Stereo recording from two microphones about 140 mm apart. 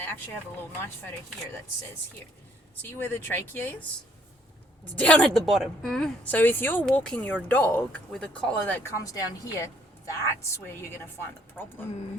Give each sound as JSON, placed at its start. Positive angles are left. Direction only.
{"t": 0.0, "sound": "a woman's voice", "side_deg": 15}
{"t": 2.8, "sound": "a woman's voice", "side_deg": 15}
{"t": 4.9, "sound": "a woman's voice", "side_deg": 10}
{"t": 9.0, "sound": "a woman's voice", "side_deg": 25}